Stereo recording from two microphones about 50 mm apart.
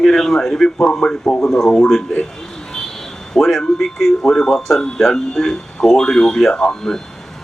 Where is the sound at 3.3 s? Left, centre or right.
Centre.